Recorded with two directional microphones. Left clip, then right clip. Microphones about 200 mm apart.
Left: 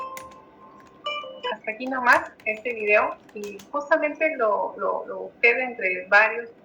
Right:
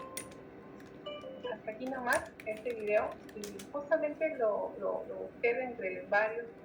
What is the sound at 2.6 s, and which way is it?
A woman's voice, 45° left (ahead or behind).